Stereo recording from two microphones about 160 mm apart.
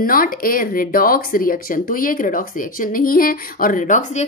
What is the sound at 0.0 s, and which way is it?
Speech, 65° left (ahead or behind).